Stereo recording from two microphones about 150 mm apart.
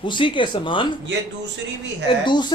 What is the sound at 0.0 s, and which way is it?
Speech, 30° left (ahead or behind).